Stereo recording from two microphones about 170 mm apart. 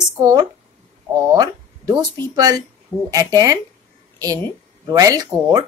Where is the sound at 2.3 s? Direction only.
20° right (ahead or behind).